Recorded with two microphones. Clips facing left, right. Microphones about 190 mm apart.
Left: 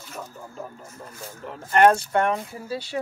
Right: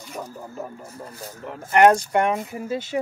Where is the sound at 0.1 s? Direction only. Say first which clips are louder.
Right 4 dB; 10° right (ahead or behind).